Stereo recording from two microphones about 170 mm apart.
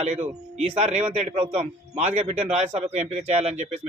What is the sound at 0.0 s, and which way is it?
Speech, 40° right (ahead or behind).